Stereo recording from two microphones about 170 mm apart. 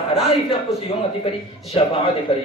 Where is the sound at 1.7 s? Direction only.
35° left (ahead or behind).